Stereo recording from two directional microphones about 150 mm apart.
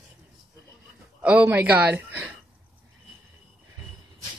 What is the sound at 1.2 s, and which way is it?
A woman's voice, 10° right (ahead or behind).